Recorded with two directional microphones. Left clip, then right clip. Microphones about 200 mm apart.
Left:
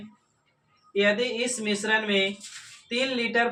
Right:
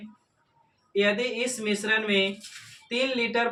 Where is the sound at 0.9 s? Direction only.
15° right (ahead or behind).